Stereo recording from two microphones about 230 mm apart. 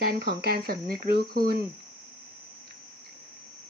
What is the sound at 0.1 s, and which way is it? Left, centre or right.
Speech, right.